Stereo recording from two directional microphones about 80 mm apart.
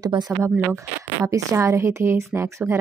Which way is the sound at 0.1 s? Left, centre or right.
Right.